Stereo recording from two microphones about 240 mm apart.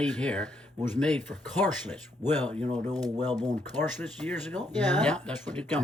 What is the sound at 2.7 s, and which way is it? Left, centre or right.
Speech, centre.